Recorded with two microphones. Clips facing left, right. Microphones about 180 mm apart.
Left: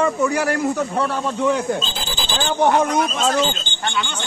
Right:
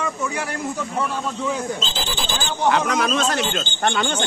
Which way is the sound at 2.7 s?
90° right.